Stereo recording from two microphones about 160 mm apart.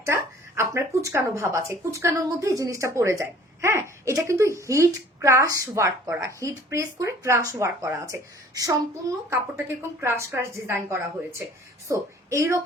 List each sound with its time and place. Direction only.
0.0 s a woman's voice: 15° right (ahead or behind)